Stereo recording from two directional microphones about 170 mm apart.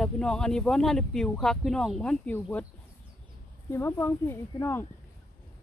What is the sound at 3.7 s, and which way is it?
Speech, 15° left (ahead or behind).